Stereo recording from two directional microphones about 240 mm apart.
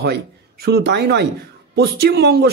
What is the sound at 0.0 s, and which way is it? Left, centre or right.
Speech, right.